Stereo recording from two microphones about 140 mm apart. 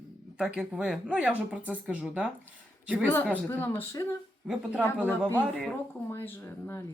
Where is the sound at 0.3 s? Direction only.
5° right (ahead or behind).